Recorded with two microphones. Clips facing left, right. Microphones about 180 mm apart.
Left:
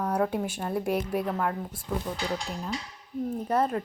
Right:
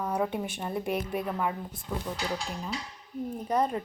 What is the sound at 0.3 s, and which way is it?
Speech, 5° left (ahead or behind).